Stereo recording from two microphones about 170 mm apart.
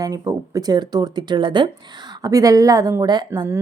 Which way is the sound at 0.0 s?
20° right (ahead or behind).